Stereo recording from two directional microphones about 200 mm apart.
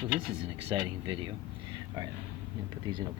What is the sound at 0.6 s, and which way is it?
Speech, 25° right (ahead or behind).